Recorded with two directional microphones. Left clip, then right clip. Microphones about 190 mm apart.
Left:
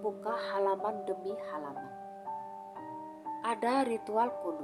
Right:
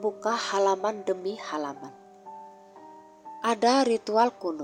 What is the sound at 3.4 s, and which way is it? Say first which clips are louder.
Speech: right 8 dB; 30° right (ahead or behind).